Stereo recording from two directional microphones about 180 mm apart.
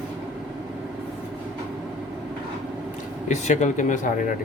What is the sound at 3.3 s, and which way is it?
Speech, 40° left (ahead or behind).